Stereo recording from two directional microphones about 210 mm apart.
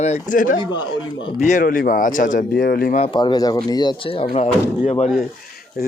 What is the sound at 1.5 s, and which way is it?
Speech, 40° left (ahead or behind).